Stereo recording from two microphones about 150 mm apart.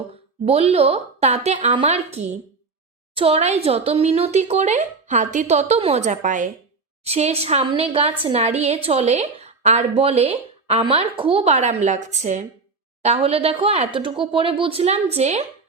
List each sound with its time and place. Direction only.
0.1 s a woman's voice: 45° right (ahead or behind)
7.0 s a woman's voice: 45° right (ahead or behind)